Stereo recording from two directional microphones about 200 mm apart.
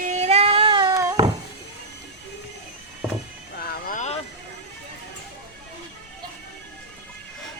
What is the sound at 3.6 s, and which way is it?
Vehicle, 40° left (ahead or behind).